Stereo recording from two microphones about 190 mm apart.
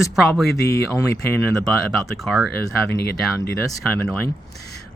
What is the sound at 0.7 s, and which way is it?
Speech, 15° left (ahead or behind).